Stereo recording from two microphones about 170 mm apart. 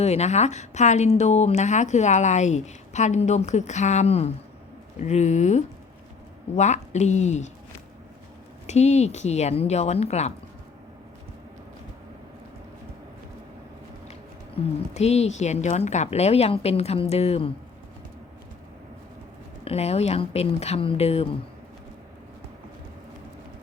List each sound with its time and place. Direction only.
0.0 s speech: 40° left (ahead or behind)
8.6 s speech: 40° left (ahead or behind)
14.1 s speech: 40° left (ahead or behind)
19.6 s speech: 35° left (ahead or behind)